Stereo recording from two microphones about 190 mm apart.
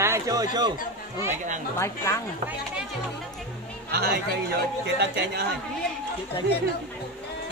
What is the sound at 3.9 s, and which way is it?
Speech, 60° right (ahead or behind).